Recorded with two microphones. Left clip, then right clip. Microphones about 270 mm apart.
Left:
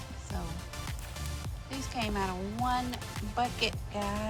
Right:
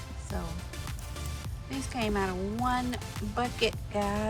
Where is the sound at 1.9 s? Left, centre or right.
Centre.